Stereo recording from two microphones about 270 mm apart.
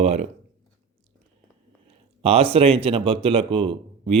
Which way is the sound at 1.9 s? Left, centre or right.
Right.